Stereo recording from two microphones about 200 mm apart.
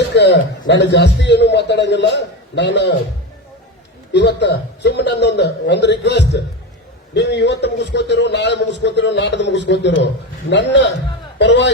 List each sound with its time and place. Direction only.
0.1 s a man's voice: 60° left (ahead or behind)
4.1 s a man's voice: 60° left (ahead or behind)